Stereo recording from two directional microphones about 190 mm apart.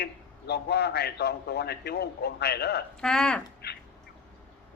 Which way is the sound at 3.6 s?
55° left (ahead or behind).